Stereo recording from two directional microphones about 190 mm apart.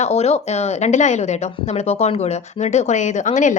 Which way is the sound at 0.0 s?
35° left (ahead or behind).